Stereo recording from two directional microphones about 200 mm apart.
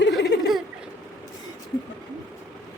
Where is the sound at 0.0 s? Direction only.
55° left (ahead or behind).